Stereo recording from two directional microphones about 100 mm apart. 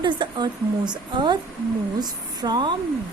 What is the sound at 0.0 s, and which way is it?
A woman's voice, 50° right (ahead or behind).